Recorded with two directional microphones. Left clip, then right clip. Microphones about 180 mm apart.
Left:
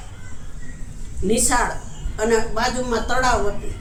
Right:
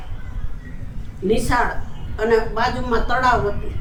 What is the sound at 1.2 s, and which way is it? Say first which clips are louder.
A woman's voice: right 1 dB; 25° left (ahead or behind).